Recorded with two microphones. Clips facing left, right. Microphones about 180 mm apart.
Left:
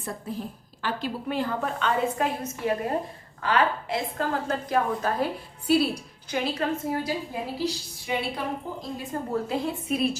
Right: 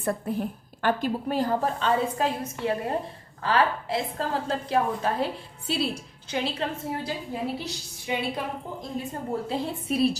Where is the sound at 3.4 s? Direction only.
30° right (ahead or behind).